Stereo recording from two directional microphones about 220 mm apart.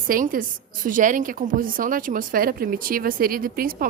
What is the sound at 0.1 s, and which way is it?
A woman's voice, 40° right (ahead or behind).